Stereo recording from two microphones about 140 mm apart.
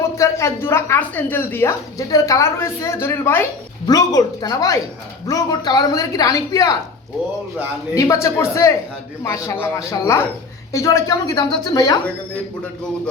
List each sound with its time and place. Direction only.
0.2 s a woman's voice: 20° left (ahead or behind)
3.8 s a woman's voice: 25° left (ahead or behind)
7.9 s a woman's voice: 25° left (ahead or behind)